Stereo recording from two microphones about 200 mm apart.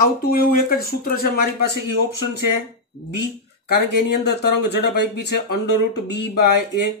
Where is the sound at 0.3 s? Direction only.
45° left (ahead or behind).